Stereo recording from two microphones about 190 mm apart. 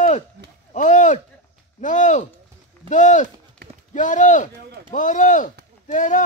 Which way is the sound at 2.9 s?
40° left (ahead or behind).